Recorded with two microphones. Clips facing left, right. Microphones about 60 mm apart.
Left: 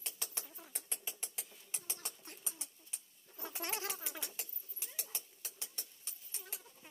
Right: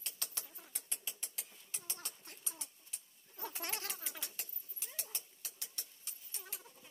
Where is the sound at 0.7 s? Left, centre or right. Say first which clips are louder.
Left 1 dB; left.